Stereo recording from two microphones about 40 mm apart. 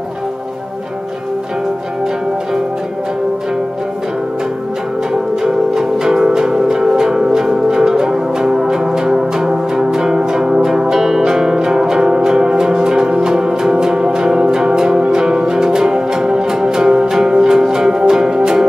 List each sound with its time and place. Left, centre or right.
5.4 s music: centre